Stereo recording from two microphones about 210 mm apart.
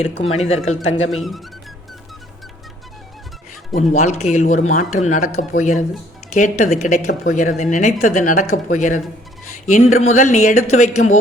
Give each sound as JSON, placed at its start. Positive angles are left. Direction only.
{"t": 0.3, "sound": "speech", "side_deg": 30}
{"t": 1.1, "sound": "speech", "side_deg": 0}
{"t": 3.8, "sound": "speech", "side_deg": 30}